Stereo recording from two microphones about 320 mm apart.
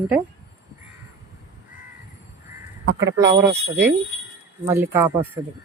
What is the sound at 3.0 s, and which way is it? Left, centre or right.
Speech, centre.